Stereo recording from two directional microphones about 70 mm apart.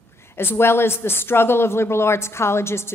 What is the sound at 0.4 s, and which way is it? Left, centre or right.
Speech, left.